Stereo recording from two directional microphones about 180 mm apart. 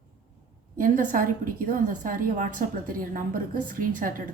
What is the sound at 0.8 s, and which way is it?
A woman's voice, 50° right (ahead or behind).